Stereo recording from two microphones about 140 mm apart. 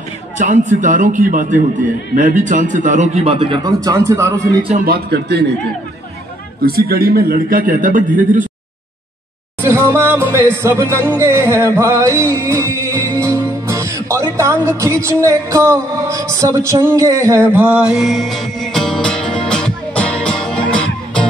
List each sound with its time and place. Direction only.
0.4 s a man's voice: 60° right (ahead or behind); by 3.6 s 40° right (ahead or behind)
3.6 s speech: 25° right (ahead or behind)
4.7 s a man's voice: 90° right
6.6 s a man's voice: 90° right; by 8.5 s 70° right (ahead or behind)
9.6 s music: 20° right (ahead or behind); by 21.3 s 5° left (ahead or behind)